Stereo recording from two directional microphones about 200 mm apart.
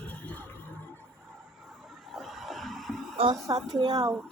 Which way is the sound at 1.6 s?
5° right (ahead or behind).